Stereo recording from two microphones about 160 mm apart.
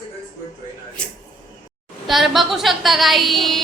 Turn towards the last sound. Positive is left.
turn(degrees=0)  # may be behind; listen again after turning